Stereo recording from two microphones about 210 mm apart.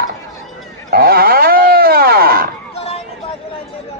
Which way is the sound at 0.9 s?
45° right (ahead or behind).